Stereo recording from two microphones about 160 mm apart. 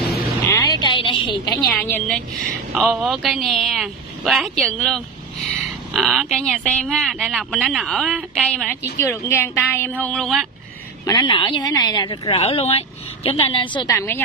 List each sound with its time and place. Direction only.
0.5 s a sound: 20° left (ahead or behind)
1.7 s a woman's voice: 10° left (ahead or behind)
8.9 s a woman's voice: 15° left (ahead or behind); by 10.5 s centre (ahead or behind)
11.1 s a woman's voice: 30° left (ahead or behind)